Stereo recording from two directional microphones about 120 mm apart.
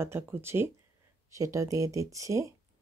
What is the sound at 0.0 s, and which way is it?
Speech, 20° right (ahead or behind).